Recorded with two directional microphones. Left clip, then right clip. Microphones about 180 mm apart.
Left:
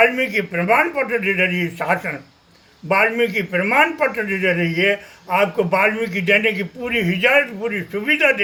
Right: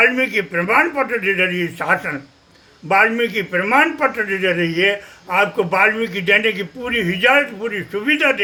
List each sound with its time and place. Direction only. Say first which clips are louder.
0.0 s a man's voice: right 1 dB; 20° right (ahead or behind)